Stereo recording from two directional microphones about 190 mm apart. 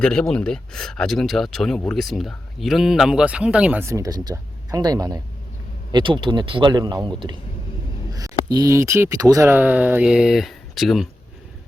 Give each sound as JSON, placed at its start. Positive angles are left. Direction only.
{"t": 0.0, "sound": "a man's voice", "side_deg": 5}